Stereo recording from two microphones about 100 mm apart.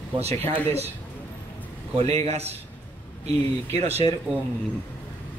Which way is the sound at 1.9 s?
90° right.